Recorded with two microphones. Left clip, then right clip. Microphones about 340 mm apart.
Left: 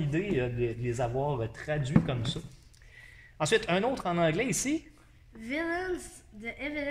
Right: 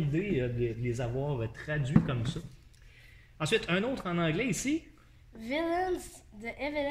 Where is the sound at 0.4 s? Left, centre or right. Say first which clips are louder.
Left 2 dB; centre.